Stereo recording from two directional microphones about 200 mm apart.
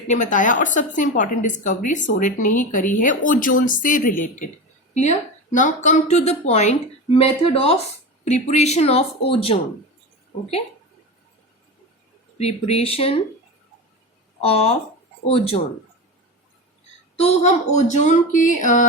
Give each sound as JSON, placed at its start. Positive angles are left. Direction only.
{"t": 0.1, "sound": "a woman's voice", "side_deg": 40}
{"t": 12.4, "sound": "a woman's voice", "side_deg": 30}
{"t": 14.4, "sound": "a woman's voice", "side_deg": 30}
{"t": 17.2, "sound": "a woman's voice", "side_deg": 30}